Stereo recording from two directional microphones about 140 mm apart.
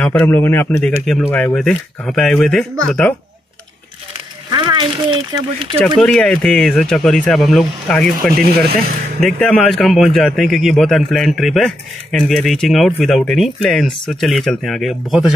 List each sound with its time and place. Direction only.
0.0 s a man's voice: 15° left (ahead or behind)
4.5 s speech: 30° right (ahead or behind)
5.9 s a man's voice: 5° left (ahead or behind)
8.3 s speech: 90° right
9.2 s a man's voice: 5° left (ahead or behind)